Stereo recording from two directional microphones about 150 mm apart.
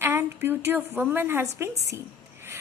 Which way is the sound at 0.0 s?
15° right (ahead or behind).